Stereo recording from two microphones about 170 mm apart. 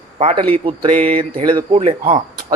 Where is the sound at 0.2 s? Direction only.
40° right (ahead or behind).